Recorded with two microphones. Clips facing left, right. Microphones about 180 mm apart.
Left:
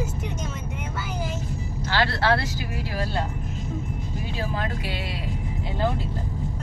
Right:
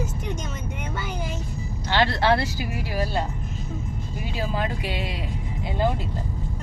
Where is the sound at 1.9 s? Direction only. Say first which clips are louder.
Right 2 dB; 20° right (ahead or behind).